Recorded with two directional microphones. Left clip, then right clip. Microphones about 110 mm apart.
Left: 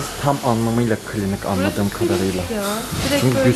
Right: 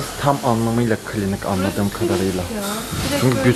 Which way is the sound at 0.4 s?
10° left (ahead or behind).